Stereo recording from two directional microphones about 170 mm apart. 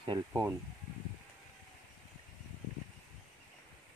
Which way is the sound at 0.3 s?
15° right (ahead or behind).